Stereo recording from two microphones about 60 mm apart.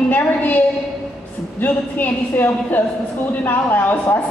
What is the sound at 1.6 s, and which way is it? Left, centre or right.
A woman's voice, left.